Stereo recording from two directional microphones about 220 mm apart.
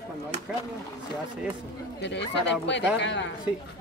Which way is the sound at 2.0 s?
55° left (ahead or behind).